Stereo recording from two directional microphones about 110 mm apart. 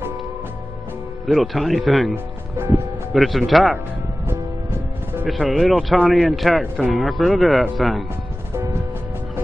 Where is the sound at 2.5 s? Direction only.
20° right (ahead or behind).